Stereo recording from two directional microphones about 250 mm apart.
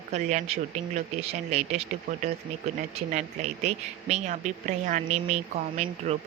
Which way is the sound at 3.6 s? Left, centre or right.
Right.